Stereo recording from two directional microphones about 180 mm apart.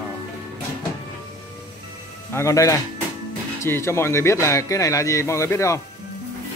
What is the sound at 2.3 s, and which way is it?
Speech, 15° left (ahead or behind).